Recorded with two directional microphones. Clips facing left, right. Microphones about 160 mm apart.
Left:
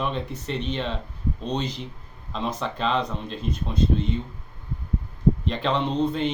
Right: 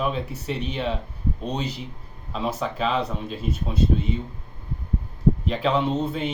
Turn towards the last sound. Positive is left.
turn(degrees=-5)  # may be behind; listen again after turning